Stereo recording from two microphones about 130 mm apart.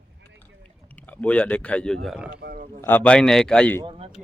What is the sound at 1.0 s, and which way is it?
Speech, 10° left (ahead or behind).